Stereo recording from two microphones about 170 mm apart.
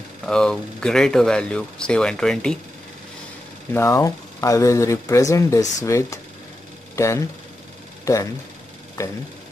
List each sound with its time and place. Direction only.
0.2 s speech: 5° left (ahead or behind)
3.7 s speech: 15° left (ahead or behind)